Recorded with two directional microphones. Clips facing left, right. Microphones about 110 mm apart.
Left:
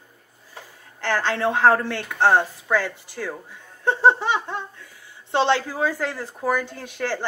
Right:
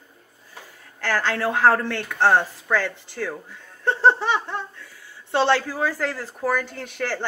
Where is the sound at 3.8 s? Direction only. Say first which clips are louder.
Left 1 dB; 15° left (ahead or behind).